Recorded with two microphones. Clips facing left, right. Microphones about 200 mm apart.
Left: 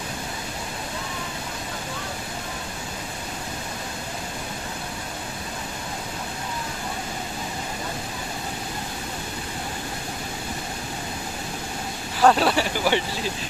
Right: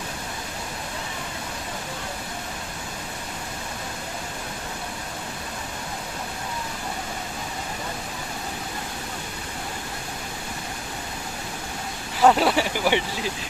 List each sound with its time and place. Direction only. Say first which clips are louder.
12.2 s speech: even; 15° right (ahead or behind)